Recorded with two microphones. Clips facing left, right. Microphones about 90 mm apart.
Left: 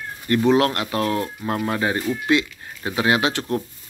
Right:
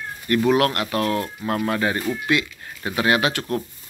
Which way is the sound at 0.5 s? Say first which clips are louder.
Left 2 dB; 25° left (ahead or behind).